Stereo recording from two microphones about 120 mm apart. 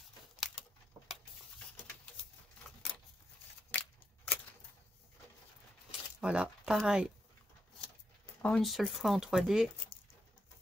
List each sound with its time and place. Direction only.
3.7 s scissors: 10° left (ahead or behind)
5.9 s a sound: 10° right (ahead or behind)
8.4 s speech: 5° left (ahead or behind)